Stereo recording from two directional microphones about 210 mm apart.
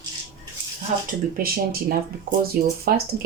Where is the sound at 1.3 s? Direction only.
45° right (ahead or behind).